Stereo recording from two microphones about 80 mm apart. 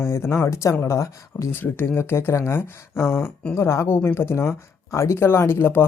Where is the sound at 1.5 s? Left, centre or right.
Left.